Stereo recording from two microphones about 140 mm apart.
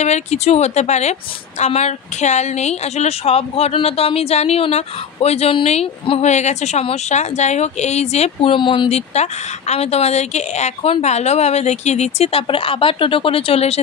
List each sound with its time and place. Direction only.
0.0 s a woman's voice: 50° left (ahead or behind)